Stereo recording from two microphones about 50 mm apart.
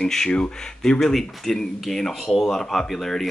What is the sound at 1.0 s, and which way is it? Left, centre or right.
Speech, centre.